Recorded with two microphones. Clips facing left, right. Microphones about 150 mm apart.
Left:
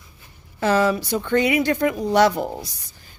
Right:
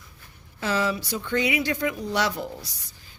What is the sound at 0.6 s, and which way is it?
Speech, 50° left (ahead or behind).